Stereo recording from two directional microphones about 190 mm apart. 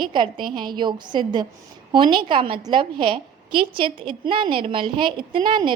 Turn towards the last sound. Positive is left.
turn(degrees=-25)  # may be behind; listen again after turning